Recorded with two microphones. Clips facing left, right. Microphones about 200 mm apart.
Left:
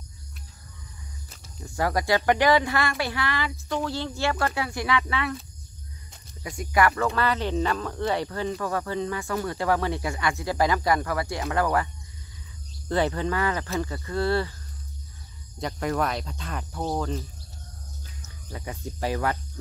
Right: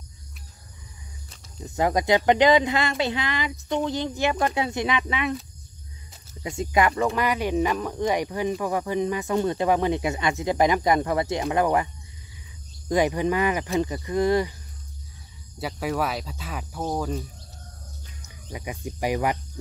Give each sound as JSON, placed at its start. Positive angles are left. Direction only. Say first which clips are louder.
{"t": 1.6, "sound": "speech", "louder": "right 3 dB", "side_deg": -20}
{"t": 6.4, "sound": "speech", "louder": "right 1 dB", "side_deg": -25}
{"t": 15.6, "sound": "speech", "louder": "even", "side_deg": -5}
{"t": 18.2, "sound": "speech", "louder": "right 2 dB", "side_deg": -15}